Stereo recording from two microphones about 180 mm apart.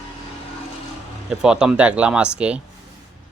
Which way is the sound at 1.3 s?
5° right (ahead or behind).